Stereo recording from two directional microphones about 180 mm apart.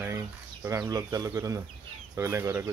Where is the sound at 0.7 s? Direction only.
20° right (ahead or behind).